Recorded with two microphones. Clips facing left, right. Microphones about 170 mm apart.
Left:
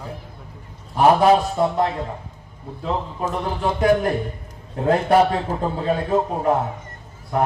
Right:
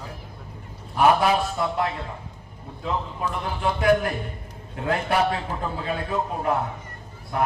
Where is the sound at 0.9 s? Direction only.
35° left (ahead or behind).